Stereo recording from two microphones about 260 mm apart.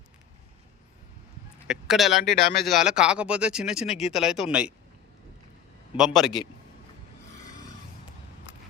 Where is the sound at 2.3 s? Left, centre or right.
Left.